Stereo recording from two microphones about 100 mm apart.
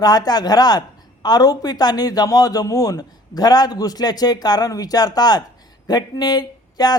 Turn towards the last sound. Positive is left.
turn(degrees=40)  # may be behind; listen again after turning